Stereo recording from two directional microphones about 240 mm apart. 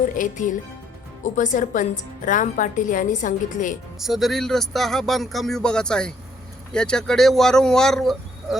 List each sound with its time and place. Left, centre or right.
0.2 s a woman's voice: left
4.0 s speech: centre